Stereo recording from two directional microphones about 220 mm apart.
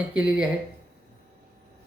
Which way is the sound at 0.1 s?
5° right (ahead or behind).